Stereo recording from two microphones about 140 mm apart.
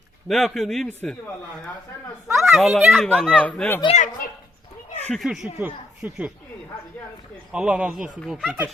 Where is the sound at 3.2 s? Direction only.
10° left (ahead or behind).